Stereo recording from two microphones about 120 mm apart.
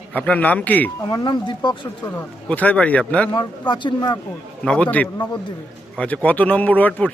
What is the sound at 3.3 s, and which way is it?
Speech, 40° left (ahead or behind).